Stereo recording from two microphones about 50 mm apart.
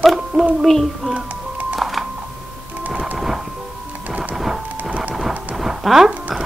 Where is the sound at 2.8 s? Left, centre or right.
Right.